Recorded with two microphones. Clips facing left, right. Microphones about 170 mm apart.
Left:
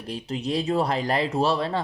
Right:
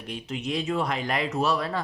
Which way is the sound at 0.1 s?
35° left (ahead or behind).